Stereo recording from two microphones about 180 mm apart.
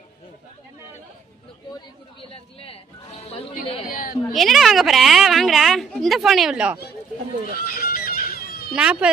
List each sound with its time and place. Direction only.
2.3 s a sound: 30° left (ahead or behind)
3.8 s a woman's voice: 55° left (ahead or behind)
4.3 s speech: centre (ahead or behind)
7.6 s music: 55° left (ahead or behind)
8.7 s speech: 5° right (ahead or behind)